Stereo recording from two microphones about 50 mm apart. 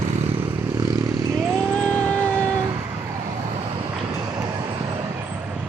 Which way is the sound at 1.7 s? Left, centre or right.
Centre.